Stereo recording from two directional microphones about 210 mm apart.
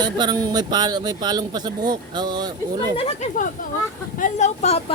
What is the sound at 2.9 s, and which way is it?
Speech, 30° left (ahead or behind).